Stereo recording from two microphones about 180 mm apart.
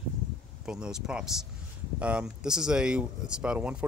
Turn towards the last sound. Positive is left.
turn(degrees=-5)  # may be behind; listen again after turning